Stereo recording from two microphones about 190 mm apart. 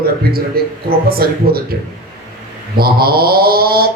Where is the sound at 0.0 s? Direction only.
55° right (ahead or behind).